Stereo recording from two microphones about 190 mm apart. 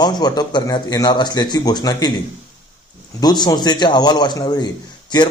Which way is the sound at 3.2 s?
20° left (ahead or behind).